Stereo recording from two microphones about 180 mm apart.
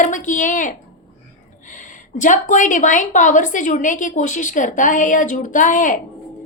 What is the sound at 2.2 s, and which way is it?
A woman's voice, 45° left (ahead or behind).